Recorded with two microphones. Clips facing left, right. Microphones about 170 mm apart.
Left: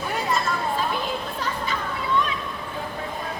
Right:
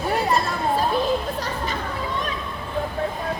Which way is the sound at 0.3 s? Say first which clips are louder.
Right 3 dB; 35° right (ahead or behind).